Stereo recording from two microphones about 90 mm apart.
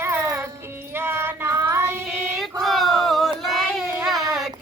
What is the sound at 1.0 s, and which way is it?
Child singing, 25° right (ahead or behind).